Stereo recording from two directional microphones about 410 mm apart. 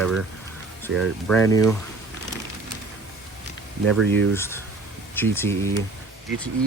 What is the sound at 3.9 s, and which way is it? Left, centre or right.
Speech, centre.